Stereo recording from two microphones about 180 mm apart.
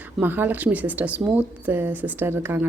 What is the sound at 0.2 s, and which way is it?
A woman's voice, 10° right (ahead or behind).